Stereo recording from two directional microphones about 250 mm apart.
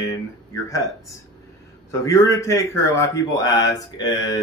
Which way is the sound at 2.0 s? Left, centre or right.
Centre.